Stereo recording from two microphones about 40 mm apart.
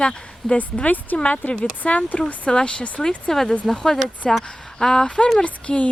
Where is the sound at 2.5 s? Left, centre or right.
Left.